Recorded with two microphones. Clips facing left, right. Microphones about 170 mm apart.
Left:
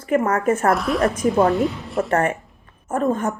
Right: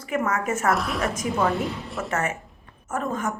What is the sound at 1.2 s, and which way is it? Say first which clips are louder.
Speech: left 6 dB; 30° left (ahead or behind).